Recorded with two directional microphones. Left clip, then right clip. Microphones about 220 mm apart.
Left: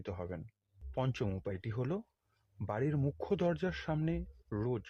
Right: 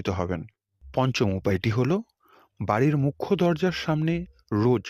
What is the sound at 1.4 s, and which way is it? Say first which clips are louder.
Speech: right 15 dB; 45° right (ahead or behind).